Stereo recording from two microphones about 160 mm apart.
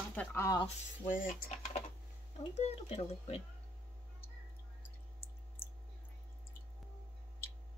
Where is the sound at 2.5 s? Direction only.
40° left (ahead or behind).